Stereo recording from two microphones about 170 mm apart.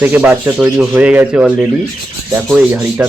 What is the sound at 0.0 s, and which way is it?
Speech, 10° right (ahead or behind).